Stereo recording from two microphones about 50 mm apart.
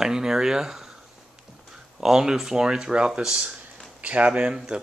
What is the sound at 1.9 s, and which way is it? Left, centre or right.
Speech, centre.